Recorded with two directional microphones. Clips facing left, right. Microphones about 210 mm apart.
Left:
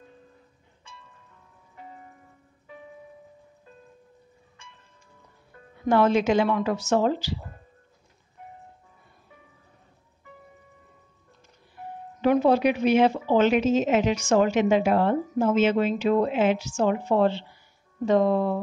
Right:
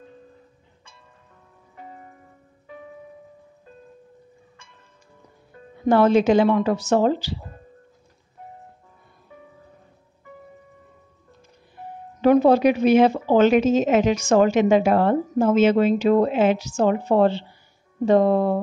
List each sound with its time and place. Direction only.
5.9 s a woman's voice: 35° right (ahead or behind)
12.2 s a woman's voice: 40° right (ahead or behind)